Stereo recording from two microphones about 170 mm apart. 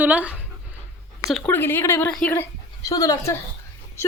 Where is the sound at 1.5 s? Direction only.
10° left (ahead or behind).